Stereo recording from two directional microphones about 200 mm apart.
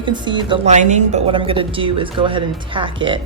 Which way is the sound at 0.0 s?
20° right (ahead or behind).